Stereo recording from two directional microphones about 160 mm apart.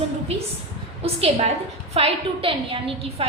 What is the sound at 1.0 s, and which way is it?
A woman's voice, 40° right (ahead or behind).